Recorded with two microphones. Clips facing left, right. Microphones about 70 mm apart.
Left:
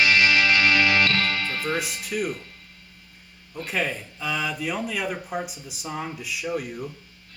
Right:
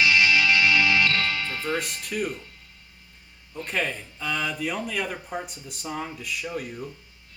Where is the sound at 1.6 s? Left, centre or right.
Centre.